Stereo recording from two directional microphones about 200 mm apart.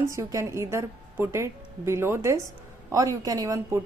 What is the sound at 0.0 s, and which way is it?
A woman's voice, 15° right (ahead or behind).